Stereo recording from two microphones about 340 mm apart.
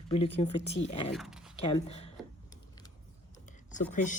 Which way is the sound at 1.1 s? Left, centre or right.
Centre.